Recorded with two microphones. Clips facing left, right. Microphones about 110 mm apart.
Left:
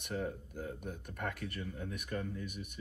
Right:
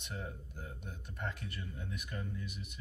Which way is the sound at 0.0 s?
50° left (ahead or behind).